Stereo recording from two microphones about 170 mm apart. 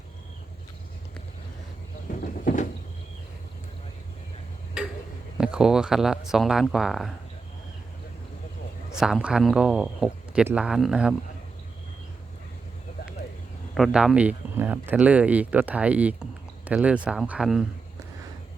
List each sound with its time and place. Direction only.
2.4 s vehicle: 50° left (ahead or behind)
4.8 s tick-tock: 5° right (ahead or behind)
5.4 s speech: 5° right (ahead or behind)
9.0 s speech: 5° right (ahead or behind)
13.7 s speech: centre (ahead or behind)